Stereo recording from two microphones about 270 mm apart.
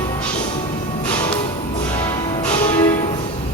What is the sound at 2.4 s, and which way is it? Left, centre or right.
Music, centre.